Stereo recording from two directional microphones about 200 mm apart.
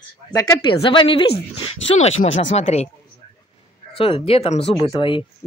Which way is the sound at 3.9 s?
25° left (ahead or behind).